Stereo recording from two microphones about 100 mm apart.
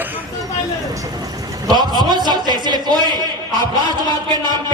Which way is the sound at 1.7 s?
45° right (ahead or behind).